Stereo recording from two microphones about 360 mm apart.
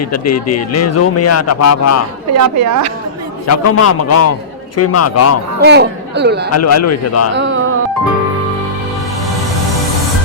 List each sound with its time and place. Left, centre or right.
0.0 s speech: left
2.3 s a woman's voice: right
3.4 s a man's voice: left
5.6 s speech: right
6.5 s speech: left
7.3 s music: right